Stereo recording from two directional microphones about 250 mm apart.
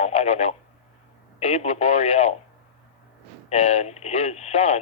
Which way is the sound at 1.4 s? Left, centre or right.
Left.